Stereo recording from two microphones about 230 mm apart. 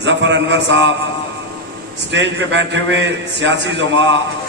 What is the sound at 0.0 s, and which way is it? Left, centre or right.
Speech, right.